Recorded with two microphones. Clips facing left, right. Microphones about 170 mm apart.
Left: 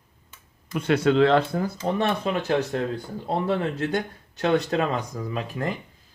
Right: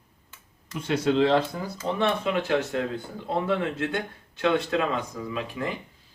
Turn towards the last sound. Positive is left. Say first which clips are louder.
# left 1 dB
turn(degrees=40)  # may be behind; listen again after turning